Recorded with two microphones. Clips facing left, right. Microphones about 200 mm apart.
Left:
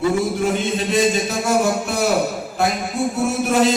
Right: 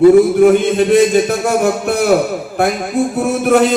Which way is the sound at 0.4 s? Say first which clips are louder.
Right 11 dB; 60° right (ahead or behind).